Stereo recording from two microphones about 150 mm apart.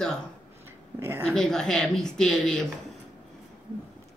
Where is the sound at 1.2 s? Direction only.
5° left (ahead or behind).